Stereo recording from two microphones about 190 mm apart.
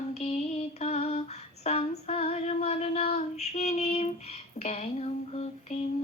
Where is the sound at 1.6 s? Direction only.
35° left (ahead or behind).